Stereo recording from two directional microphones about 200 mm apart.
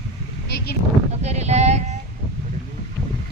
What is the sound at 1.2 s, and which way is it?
Speech, 35° right (ahead or behind).